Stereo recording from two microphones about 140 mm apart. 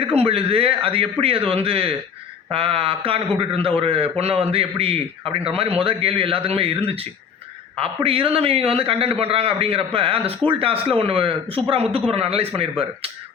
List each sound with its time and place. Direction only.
0.0 s a man's voice: 45° right (ahead or behind)